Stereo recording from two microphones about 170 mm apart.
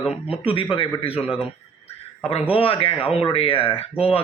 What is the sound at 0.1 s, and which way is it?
Speech, 35° left (ahead or behind).